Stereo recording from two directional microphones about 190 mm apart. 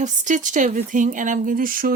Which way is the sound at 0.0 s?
40° right (ahead or behind).